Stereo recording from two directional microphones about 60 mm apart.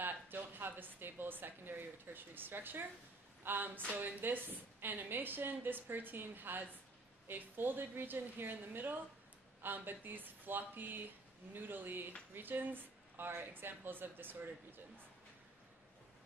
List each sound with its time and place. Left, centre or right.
0.0 s a woman's voice: right